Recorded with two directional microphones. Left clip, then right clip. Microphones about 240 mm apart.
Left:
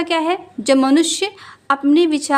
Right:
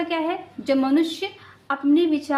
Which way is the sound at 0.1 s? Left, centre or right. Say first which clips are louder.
Left 7 dB; left.